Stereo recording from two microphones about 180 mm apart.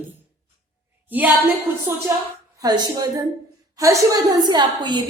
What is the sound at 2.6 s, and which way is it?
A woman's voice, 20° right (ahead or behind).